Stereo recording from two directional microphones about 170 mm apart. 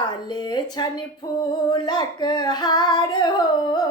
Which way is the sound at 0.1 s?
25° left (ahead or behind).